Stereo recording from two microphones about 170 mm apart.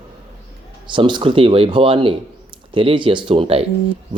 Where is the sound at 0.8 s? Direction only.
30° right (ahead or behind).